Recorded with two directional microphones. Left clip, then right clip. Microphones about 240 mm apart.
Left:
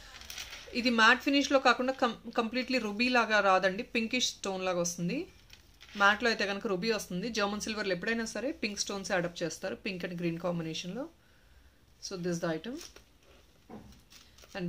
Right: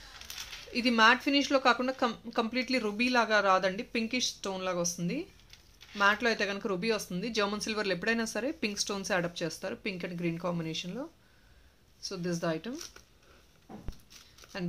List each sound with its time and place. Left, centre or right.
0.7 s a woman's voice: centre
14.5 s a woman's voice: centre